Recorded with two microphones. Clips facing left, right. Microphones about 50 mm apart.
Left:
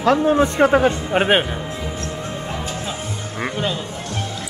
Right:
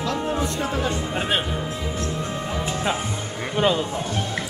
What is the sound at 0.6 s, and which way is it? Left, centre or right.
Speech, left.